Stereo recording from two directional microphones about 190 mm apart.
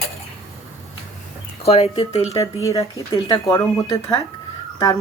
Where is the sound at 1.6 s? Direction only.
35° left (ahead or behind).